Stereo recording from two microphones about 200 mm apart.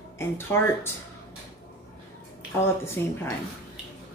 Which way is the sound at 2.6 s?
10° left (ahead or behind).